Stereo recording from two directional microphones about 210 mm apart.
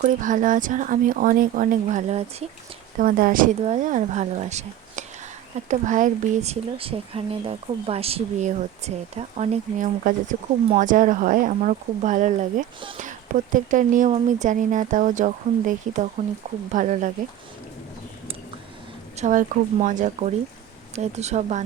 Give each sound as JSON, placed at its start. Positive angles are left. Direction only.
{"t": 0.0, "sound": "speech", "side_deg": -40}
{"t": 19.1, "sound": "speech", "side_deg": -35}